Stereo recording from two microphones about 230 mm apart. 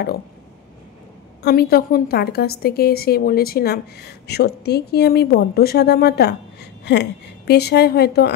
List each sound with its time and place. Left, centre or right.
1.4 s a woman's voice: left